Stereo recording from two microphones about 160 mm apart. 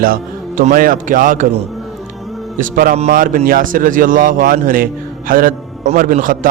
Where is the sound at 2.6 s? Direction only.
60° right (ahead or behind).